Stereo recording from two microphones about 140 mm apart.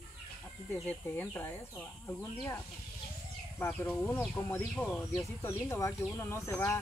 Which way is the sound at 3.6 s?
15° left (ahead or behind).